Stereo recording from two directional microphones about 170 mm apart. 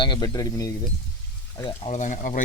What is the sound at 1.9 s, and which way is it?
Speech, 45° left (ahead or behind).